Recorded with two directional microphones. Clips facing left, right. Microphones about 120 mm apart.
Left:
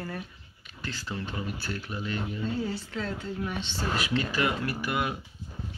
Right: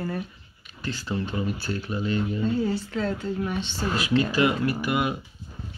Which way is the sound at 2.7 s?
40° right (ahead or behind).